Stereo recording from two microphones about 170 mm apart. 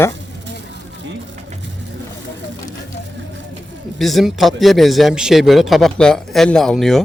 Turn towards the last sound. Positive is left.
turn(degrees=0)  # may be behind; listen again after turning